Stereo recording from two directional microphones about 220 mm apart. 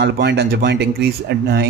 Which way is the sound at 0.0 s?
50° right (ahead or behind).